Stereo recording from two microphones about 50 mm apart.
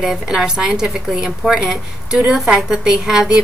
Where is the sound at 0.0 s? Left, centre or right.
Centre.